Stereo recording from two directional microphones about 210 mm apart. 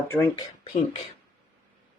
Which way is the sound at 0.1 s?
10° left (ahead or behind).